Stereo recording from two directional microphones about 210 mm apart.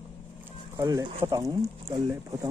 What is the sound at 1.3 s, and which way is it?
Speech, 15° right (ahead or behind).